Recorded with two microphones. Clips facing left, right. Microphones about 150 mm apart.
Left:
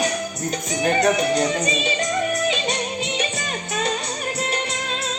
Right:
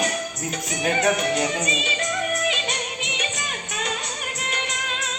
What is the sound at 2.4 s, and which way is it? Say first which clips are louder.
Music: left 4 dB; 35° left (ahead or behind).